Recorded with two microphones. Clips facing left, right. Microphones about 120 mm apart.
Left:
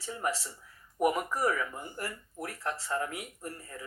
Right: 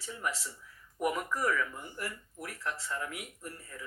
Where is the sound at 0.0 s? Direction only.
35° left (ahead or behind).